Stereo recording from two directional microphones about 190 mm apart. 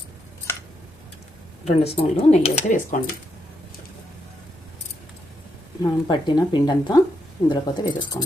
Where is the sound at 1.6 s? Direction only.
30° left (ahead or behind).